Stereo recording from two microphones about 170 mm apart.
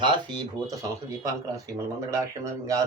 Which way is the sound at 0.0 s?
25° right (ahead or behind).